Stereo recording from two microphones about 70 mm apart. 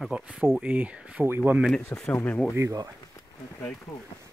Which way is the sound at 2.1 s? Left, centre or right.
Left.